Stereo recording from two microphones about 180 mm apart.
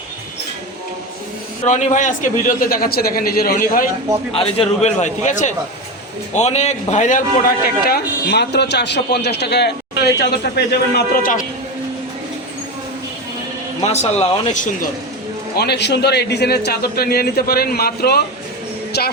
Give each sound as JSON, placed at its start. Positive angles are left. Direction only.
{"t": 1.6, "sound": "a man's voice", "side_deg": 45}
{"t": 4.3, "sound": "a man's voice", "side_deg": 30}
{"t": 13.8, "sound": "a man's voice", "side_deg": 35}
{"t": 15.5, "sound": "a man's voice", "side_deg": 65}